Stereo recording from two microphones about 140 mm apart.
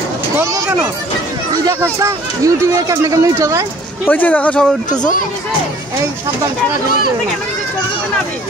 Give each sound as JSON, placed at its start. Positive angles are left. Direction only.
{"t": 0.4, "sound": "speech", "side_deg": -25}
{"t": 1.8, "sound": "speech", "side_deg": -20}
{"t": 4.1, "sound": "speech", "side_deg": 10}